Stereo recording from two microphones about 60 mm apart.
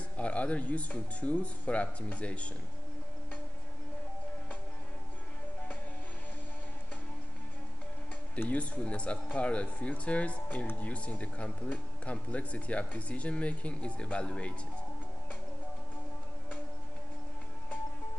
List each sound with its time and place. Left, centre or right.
0.2 s speech: left
8.5 s speech: left